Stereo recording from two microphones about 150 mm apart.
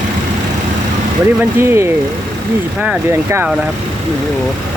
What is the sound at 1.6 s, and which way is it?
Speech, 15° right (ahead or behind).